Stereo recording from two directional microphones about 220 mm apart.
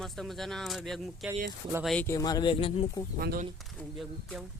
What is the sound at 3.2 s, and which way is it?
Speech, 45° right (ahead or behind).